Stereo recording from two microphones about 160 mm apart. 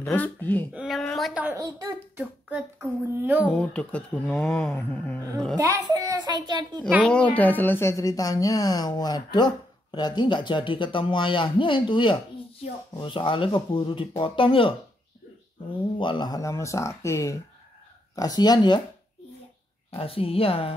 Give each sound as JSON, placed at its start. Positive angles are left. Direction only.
{"t": 0.0, "sound": "speech", "side_deg": 10}
{"t": 0.7, "sound": "a sound", "side_deg": 0}
{"t": 1.4, "sound": "a child's voice", "side_deg": -15}
{"t": 3.4, "sound": "speech", "side_deg": 10}
{"t": 5.6, "sound": "a child's voice", "side_deg": -20}
{"t": 7.0, "sound": "speech", "side_deg": 5}
{"t": 16.0, "sound": "speech", "side_deg": 30}
{"t": 19.9, "sound": "speech", "side_deg": 35}